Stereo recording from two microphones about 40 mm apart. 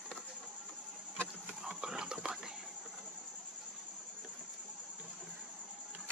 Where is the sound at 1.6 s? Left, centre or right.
Centre.